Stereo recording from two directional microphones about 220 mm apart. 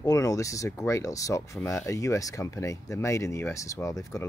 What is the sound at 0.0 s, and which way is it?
Speech, 15° left (ahead or behind).